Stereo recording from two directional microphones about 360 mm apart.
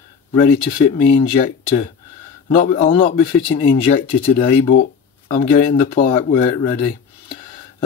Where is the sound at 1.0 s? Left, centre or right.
Centre.